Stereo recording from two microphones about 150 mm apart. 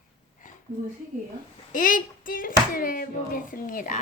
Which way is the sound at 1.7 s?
65° left (ahead or behind).